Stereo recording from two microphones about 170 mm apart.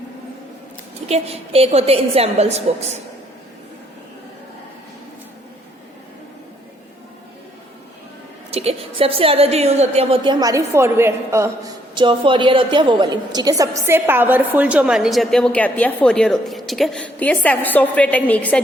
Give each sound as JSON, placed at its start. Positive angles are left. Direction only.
{"t": 1.0, "sound": "a woman's voice", "side_deg": -35}
{"t": 8.4, "sound": "a woman's voice", "side_deg": -35}
{"t": 10.4, "sound": "a woman's voice", "side_deg": -15}